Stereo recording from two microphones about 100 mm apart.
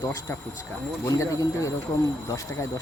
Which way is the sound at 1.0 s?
30° left (ahead or behind).